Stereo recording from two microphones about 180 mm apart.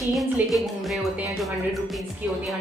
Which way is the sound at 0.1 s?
Centre (ahead or behind).